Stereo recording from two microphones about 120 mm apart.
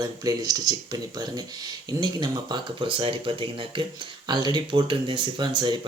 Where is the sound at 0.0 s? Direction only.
30° right (ahead or behind).